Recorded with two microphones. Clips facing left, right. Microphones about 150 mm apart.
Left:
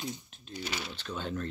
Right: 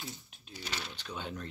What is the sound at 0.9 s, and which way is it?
Speech, 15° right (ahead or behind).